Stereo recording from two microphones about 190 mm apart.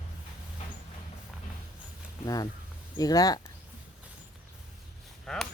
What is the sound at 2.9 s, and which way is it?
Speech, 20° left (ahead or behind).